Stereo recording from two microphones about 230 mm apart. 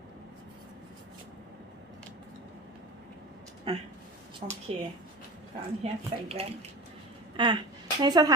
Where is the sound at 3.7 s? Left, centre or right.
Right.